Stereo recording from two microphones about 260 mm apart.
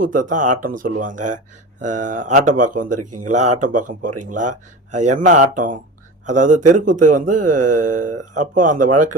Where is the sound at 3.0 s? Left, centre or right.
Right.